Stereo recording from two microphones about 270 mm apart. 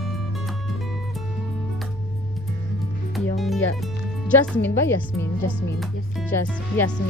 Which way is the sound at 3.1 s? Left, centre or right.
Centre.